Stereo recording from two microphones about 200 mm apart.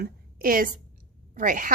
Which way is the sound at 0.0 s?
45° right (ahead or behind).